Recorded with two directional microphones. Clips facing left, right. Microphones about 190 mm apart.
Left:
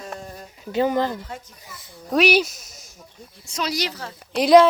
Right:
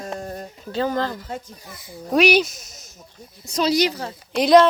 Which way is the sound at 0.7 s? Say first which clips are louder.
Left 2 dB; 15° left (ahead or behind).